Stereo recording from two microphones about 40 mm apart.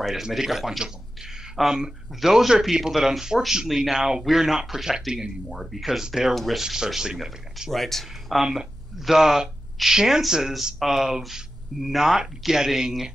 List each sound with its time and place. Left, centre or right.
0.2 s speech: centre
1.6 s speech: centre
2.2 s speech: centre
5.5 s speech: centre
5.9 s speech: centre
6.3 s speech: centre
6.6 s speech: centre
7.7 s speech: centre
9.1 s speech: centre